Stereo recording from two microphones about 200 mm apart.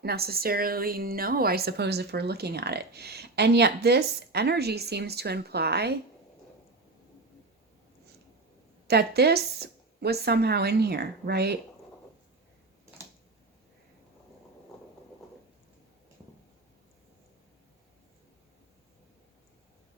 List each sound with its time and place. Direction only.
0.0 s a woman's voice: 50° right (ahead or behind)
8.9 s a woman's voice: 55° right (ahead or behind)